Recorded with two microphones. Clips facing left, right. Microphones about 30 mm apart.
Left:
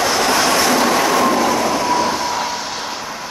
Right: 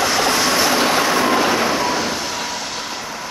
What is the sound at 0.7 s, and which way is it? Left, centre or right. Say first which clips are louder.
Train: left 2 dB; centre.